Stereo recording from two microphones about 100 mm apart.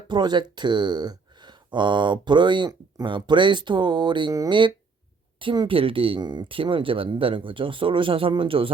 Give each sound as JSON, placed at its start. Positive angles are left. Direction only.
{"t": 0.1, "sound": "speech", "side_deg": -50}
{"t": 5.6, "sound": "speech", "side_deg": -65}